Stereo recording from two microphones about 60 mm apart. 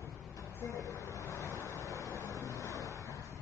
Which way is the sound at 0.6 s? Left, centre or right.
Left.